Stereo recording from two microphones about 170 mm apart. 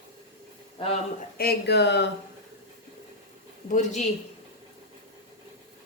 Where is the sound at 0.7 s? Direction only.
35° left (ahead or behind).